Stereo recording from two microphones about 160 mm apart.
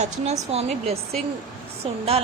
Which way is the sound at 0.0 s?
45° right (ahead or behind).